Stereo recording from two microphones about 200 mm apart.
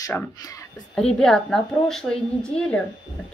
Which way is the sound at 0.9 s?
5° left (ahead or behind).